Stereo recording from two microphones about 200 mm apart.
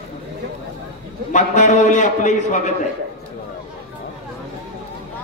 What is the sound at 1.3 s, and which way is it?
A man's voice, 40° left (ahead or behind).